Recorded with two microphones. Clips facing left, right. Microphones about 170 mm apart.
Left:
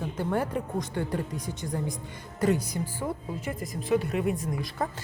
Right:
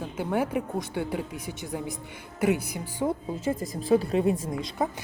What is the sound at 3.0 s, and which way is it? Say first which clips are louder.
A woman's voice: right 5 dB; 25° right (ahead or behind).